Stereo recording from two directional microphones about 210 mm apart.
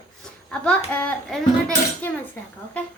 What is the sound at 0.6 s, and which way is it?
A child's voice, 5° left (ahead or behind).